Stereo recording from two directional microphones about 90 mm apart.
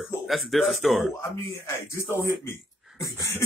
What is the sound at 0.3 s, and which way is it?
Speech, centre (ahead or behind).